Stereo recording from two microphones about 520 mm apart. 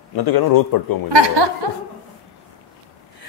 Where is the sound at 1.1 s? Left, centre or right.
Right.